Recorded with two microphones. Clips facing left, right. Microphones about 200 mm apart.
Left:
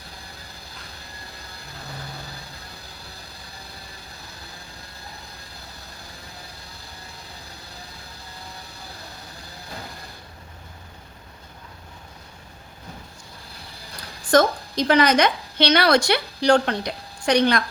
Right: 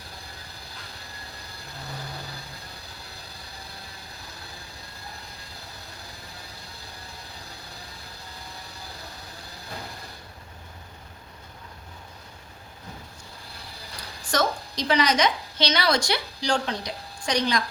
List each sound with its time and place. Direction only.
14.3 s a woman's voice: 55° left (ahead or behind)